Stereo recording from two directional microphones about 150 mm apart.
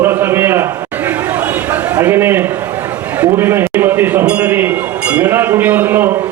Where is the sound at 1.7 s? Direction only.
15° right (ahead or behind).